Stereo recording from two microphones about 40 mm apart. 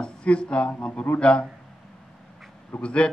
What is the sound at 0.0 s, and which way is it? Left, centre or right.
A man's voice, left.